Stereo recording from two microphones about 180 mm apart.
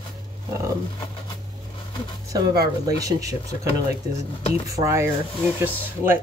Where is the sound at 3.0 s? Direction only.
20° right (ahead or behind).